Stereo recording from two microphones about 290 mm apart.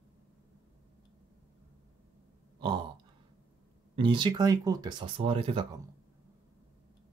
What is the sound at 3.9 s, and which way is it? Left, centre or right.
Speech, centre.